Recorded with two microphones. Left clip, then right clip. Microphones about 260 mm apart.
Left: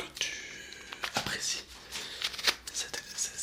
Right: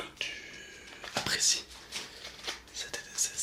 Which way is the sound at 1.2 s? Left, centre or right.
Centre.